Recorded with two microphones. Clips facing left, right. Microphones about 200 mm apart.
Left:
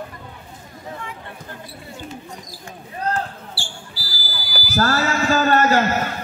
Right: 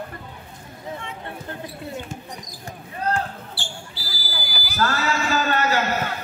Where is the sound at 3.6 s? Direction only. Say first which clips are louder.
Even; 20° right (ahead or behind).